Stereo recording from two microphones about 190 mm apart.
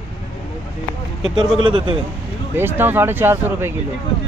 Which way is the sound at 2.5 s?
10° right (ahead or behind).